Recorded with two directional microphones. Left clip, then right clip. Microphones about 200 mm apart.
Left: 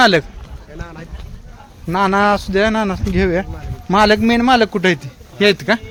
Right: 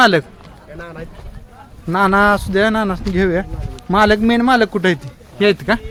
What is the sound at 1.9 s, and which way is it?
A man's voice, centre (ahead or behind).